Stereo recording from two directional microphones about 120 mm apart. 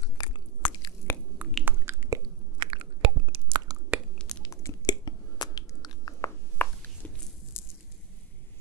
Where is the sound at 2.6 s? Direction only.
45° right (ahead or behind).